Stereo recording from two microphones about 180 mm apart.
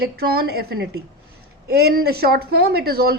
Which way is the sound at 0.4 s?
60° right (ahead or behind).